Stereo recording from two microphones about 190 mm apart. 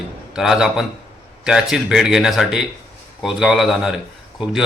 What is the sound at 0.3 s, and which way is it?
Speech, centre (ahead or behind).